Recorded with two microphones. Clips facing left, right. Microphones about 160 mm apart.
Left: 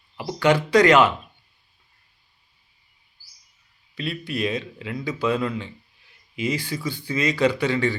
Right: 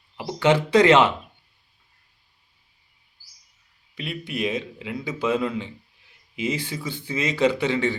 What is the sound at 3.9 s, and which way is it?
A man's voice, 20° right (ahead or behind).